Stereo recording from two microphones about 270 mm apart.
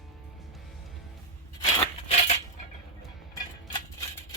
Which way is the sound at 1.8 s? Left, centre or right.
Left.